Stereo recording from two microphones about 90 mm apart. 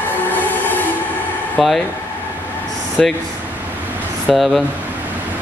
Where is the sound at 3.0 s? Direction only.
5° left (ahead or behind).